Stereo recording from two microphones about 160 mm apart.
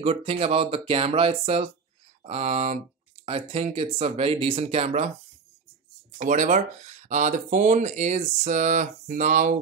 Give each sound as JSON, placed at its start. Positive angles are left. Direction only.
{"t": 0.0, "sound": "speech", "side_deg": -40}
{"t": 6.1, "sound": "speech", "side_deg": -50}